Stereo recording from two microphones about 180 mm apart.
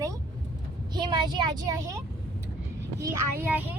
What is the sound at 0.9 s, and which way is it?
Speech, 25° right (ahead or behind).